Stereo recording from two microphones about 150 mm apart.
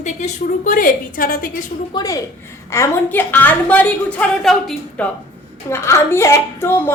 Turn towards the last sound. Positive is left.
turn(degrees=15)  # may be behind; listen again after turning